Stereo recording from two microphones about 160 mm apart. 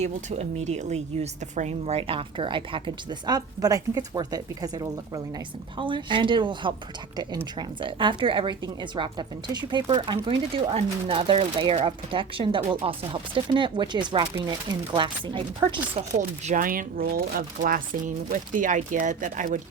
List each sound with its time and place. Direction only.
0.0 s speech: 45° right (ahead or behind)
16.5 s speech: 60° right (ahead or behind)